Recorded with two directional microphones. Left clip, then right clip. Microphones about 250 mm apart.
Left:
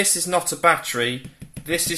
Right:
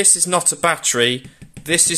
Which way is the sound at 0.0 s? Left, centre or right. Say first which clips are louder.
Right 4 dB; right.